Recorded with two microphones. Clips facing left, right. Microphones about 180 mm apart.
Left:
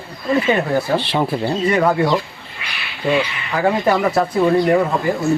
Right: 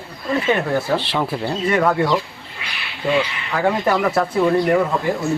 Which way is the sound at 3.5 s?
5° left (ahead or behind).